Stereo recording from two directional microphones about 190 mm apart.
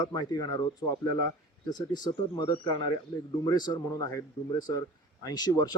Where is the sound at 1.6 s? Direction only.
20° left (ahead or behind).